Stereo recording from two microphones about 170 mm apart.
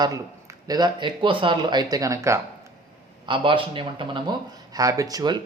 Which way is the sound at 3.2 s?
30° right (ahead or behind).